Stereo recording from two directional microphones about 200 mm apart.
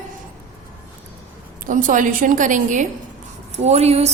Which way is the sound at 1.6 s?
40° right (ahead or behind).